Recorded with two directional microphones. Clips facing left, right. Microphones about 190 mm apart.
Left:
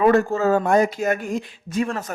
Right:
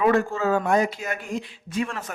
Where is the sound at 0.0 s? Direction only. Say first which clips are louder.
Left 4 dB; 40° left (ahead or behind).